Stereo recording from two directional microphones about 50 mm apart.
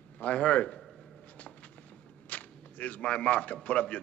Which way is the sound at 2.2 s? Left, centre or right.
Left.